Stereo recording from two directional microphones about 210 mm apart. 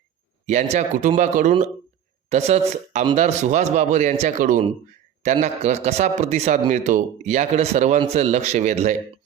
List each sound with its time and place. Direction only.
0.4 s a man's voice: 35° right (ahead or behind)